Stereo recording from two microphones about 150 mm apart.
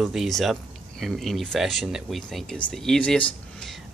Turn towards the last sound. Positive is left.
turn(degrees=5)  # may be behind; listen again after turning